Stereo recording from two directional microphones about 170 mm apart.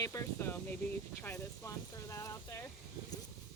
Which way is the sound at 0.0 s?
15° left (ahead or behind).